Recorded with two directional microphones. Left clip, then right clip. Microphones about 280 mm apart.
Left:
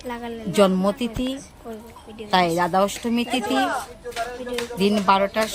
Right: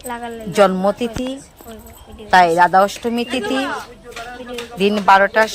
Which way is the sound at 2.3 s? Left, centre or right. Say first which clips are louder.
Right 9 dB; centre.